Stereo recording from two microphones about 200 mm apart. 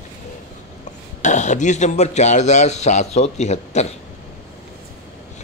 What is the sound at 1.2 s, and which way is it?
Speech, 35° left (ahead or behind).